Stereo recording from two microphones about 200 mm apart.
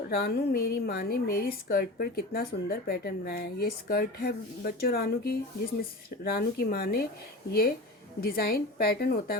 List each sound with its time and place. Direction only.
0.1 s a woman's voice: 50° left (ahead or behind)
8.2 s a woman's voice: 50° left (ahead or behind)